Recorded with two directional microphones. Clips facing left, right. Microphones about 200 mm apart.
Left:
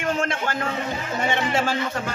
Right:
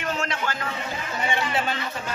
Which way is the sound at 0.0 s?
50° left (ahead or behind).